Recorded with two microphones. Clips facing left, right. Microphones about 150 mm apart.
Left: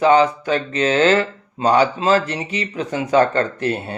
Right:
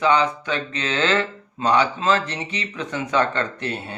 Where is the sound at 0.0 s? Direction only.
40° left (ahead or behind).